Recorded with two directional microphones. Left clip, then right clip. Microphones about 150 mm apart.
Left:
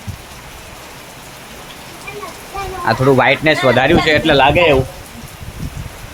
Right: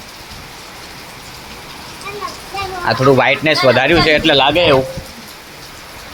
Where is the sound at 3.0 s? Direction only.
10° left (ahead or behind).